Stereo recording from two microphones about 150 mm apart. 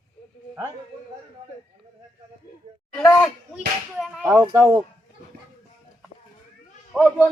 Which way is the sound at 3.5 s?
Centre (ahead or behind).